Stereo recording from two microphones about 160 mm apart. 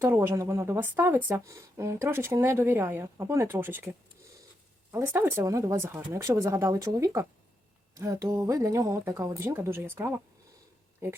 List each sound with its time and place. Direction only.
0.0 s speech: 15° right (ahead or behind)
4.9 s speech: 15° right (ahead or behind)